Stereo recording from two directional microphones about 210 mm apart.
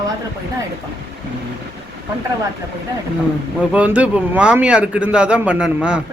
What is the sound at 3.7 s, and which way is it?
A man's voice, 5° right (ahead or behind).